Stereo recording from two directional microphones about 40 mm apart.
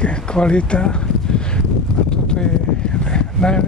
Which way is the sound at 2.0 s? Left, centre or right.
Left.